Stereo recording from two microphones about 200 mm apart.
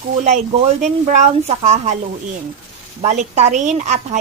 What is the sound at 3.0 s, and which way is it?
A woman's voice, 35° right (ahead or behind).